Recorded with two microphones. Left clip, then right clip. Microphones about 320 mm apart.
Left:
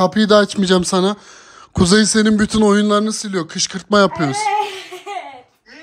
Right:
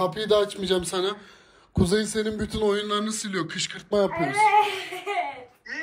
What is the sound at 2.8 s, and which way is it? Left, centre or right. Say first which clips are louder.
Speech: left 10 dB; centre.